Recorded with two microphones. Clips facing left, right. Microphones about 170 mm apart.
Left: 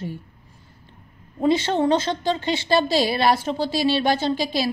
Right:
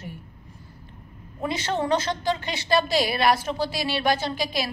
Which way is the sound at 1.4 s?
25° left (ahead or behind).